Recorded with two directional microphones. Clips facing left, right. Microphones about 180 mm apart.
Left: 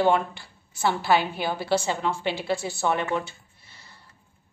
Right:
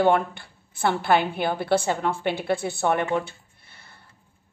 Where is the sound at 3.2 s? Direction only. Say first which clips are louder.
Right 1 dB; 55° right (ahead or behind).